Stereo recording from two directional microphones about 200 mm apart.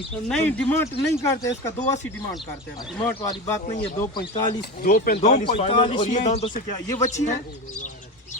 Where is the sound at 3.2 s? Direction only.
20° left (ahead or behind).